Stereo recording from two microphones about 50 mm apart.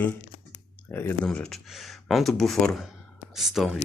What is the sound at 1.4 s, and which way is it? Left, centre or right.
Speech, centre.